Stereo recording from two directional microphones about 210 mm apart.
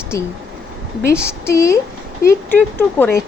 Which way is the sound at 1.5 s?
15° left (ahead or behind).